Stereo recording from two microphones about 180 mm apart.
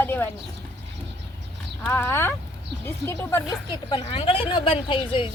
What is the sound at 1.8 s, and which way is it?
Speech, 10° left (ahead or behind).